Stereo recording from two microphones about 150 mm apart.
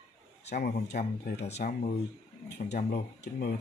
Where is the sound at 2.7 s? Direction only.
90° left.